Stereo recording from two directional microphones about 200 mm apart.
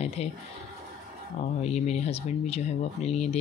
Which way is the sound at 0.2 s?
30° left (ahead or behind).